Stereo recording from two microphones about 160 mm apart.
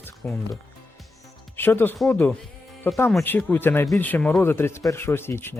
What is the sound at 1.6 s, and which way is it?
Speech, 15° left (ahead or behind).